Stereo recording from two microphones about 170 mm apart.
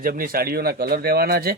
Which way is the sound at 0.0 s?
55° right (ahead or behind).